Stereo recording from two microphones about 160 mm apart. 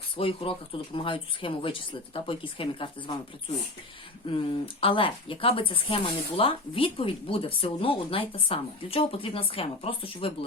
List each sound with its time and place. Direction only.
0.2 s speech: 35° left (ahead or behind)
4.3 s speech: 35° left (ahead or behind)